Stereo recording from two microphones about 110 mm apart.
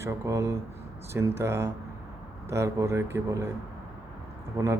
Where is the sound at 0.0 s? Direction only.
30° right (ahead or behind).